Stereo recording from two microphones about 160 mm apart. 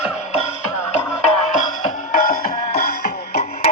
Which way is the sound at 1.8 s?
60° left (ahead or behind).